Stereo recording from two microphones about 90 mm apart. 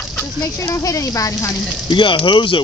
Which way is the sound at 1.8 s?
65° left (ahead or behind).